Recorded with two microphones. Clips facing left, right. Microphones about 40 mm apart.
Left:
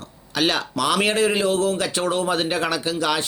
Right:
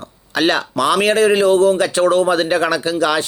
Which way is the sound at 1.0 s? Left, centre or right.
Centre.